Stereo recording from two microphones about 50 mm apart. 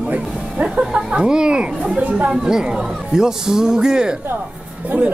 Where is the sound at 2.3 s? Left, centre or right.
Centre.